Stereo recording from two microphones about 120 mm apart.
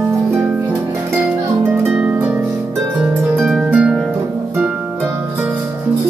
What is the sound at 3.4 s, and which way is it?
Harp, 5° right (ahead or behind).